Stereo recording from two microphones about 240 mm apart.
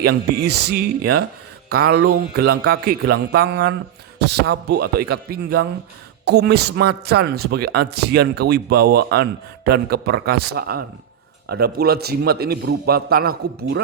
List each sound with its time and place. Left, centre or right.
0.0 s a man's voice: right